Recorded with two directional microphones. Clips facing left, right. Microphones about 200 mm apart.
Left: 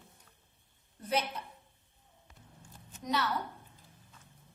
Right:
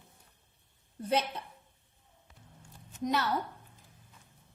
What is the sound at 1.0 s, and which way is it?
Speech, 30° right (ahead or behind).